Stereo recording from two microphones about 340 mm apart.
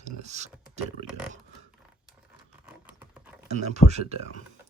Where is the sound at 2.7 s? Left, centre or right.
Centre.